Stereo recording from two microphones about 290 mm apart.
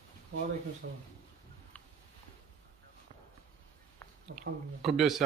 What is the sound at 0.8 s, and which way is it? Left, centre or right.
Speech, right.